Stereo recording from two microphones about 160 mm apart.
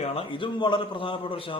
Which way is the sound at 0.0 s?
35° left (ahead or behind).